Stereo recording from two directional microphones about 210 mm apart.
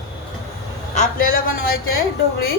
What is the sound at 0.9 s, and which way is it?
Speech, 45° left (ahead or behind).